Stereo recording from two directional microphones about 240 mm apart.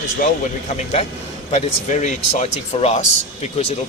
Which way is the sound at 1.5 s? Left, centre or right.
Left.